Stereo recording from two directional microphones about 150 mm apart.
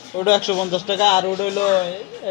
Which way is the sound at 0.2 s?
25° left (ahead or behind).